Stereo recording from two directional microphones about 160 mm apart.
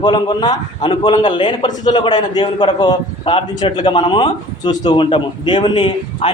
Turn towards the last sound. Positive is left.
turn(degrees=30)  # may be behind; listen again after turning